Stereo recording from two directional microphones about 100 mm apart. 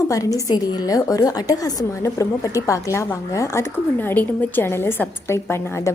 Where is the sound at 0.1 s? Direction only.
35° left (ahead or behind).